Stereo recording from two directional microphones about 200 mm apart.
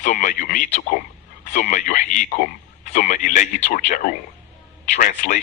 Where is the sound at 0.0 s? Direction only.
40° left (ahead or behind).